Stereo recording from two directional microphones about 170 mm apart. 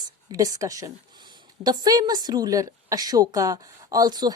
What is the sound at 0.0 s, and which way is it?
Speech, 20° right (ahead or behind).